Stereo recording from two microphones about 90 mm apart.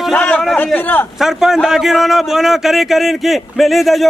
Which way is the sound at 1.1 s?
5° right (ahead or behind).